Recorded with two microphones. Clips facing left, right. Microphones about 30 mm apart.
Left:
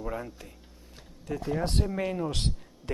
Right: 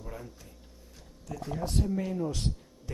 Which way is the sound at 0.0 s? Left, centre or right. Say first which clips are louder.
Left 8 dB; left.